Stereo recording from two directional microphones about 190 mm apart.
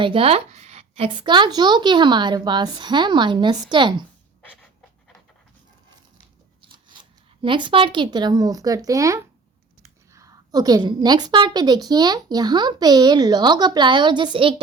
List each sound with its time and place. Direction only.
0.0 s a woman's voice: 30° right (ahead or behind)
6.6 s a woman's voice: 25° right (ahead or behind)